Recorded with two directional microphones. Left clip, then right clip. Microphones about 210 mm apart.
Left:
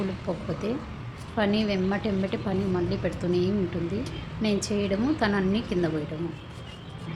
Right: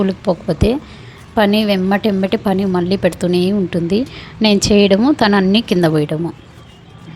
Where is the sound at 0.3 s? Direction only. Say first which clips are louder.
Right 15 dB; 40° right (ahead or behind).